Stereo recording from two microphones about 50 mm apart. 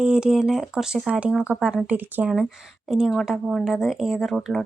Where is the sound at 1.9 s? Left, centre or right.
Right.